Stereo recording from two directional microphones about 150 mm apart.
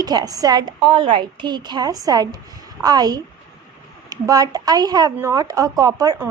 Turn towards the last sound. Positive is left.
turn(degrees=-25)  # may be behind; listen again after turning